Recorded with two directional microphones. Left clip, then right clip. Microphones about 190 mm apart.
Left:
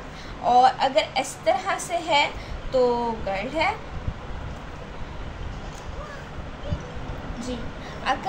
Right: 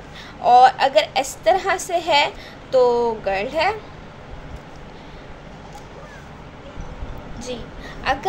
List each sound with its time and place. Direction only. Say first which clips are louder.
0.4 s a woman's voice: right 5 dB; 45° right (ahead or behind)
8.0 s speech: right 4 dB; 40° right (ahead or behind)